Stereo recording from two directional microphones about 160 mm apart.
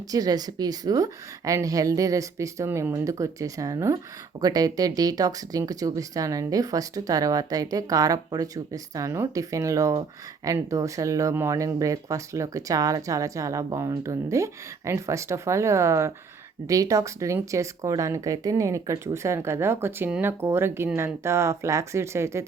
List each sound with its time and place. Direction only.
0.1 s a woman's voice: 25° right (ahead or behind)